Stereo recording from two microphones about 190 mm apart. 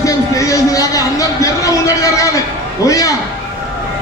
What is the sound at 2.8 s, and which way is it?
Speech, 15° left (ahead or behind).